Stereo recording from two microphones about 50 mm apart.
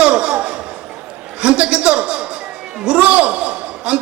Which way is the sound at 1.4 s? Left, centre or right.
Right.